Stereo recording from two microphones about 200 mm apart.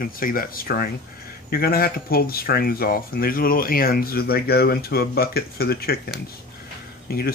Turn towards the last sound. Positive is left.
turn(degrees=50)  # may be behind; listen again after turning